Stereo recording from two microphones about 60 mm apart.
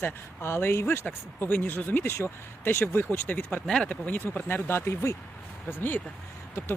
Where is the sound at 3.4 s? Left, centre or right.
Left.